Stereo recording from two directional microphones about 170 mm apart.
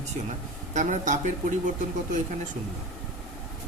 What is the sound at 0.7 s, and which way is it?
Speech, 45° right (ahead or behind).